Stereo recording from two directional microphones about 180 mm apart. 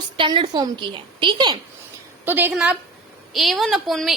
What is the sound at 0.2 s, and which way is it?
A woman's voice, 25° right (ahead or behind).